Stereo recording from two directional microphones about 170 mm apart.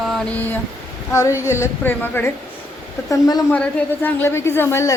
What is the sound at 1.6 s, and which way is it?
Speech, 10° left (ahead or behind).